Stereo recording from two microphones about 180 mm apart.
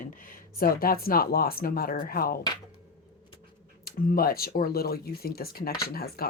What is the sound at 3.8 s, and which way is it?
Speech, 55° left (ahead or behind).